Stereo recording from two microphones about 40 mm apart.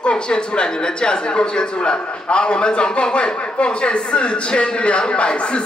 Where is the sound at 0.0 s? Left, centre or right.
Left.